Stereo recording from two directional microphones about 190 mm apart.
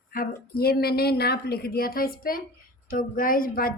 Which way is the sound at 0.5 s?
55° left (ahead or behind).